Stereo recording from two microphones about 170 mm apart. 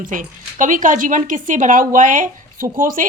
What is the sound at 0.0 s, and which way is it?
A woman's voice, 50° right (ahead or behind).